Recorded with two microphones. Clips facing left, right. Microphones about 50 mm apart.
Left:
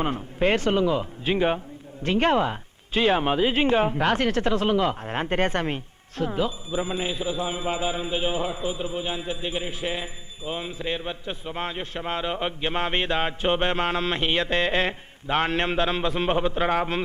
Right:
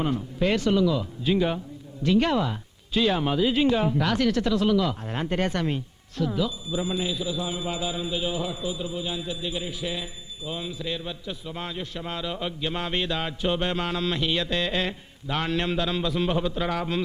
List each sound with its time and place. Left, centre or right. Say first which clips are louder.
0.0 s speech: left 1 dB; left